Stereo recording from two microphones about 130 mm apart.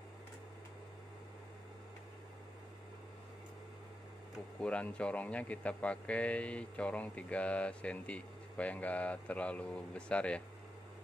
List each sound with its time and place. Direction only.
4.6 s speech: 10° left (ahead or behind)